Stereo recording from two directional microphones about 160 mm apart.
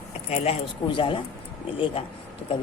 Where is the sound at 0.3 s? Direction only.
40° left (ahead or behind).